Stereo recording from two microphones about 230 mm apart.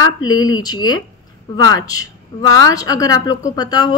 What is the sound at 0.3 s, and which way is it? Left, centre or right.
A woman's voice, centre.